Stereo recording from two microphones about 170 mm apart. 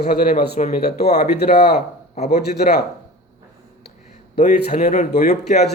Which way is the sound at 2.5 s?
65° left (ahead or behind).